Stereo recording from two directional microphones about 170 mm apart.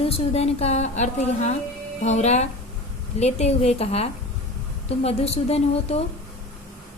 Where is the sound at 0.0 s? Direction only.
35° left (ahead or behind).